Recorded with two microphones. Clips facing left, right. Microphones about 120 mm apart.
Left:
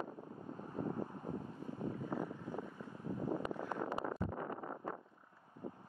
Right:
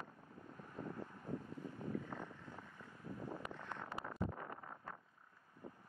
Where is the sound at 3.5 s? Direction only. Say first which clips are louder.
Left 9 dB; 10° left (ahead or behind).